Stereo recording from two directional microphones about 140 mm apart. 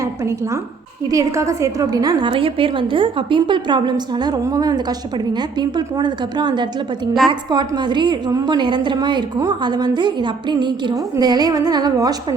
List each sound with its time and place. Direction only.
0.0 s a woman's voice: 20° right (ahead or behind)
2.3 s a woman's voice: 40° right (ahead or behind)